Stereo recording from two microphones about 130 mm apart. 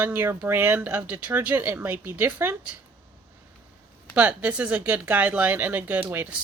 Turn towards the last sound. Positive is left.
turn(degrees=-15)  # may be behind; listen again after turning